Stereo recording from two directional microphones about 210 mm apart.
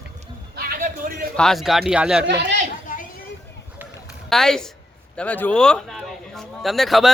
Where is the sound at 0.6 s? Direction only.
40° right (ahead or behind).